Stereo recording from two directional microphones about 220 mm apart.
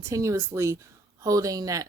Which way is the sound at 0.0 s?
15° right (ahead or behind).